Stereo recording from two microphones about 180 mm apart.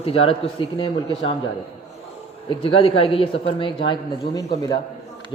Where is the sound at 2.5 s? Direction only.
30° left (ahead or behind).